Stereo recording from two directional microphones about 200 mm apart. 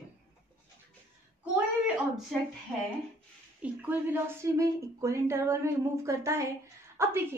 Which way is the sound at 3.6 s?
10° right (ahead or behind).